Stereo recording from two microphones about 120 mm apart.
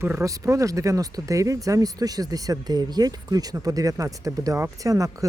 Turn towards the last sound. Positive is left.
turn(degrees=-30)  # may be behind; listen again after turning